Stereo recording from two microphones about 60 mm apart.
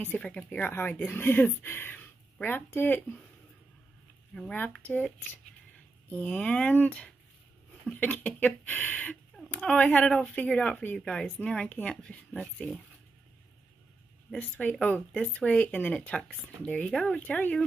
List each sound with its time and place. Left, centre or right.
0.0 s speech: left
0.7 s speech: left
4.3 s speech: centre
4.6 s speech: left
14.4 s speech: left
17.1 s speech: left